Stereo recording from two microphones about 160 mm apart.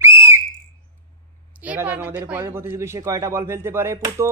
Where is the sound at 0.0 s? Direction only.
15° right (ahead or behind).